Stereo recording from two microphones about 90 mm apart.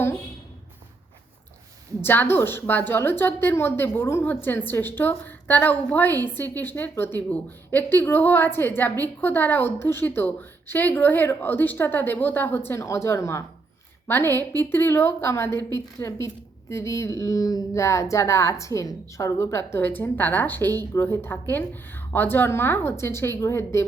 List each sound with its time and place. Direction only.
2.0 s a woman's voice: 25° left (ahead or behind)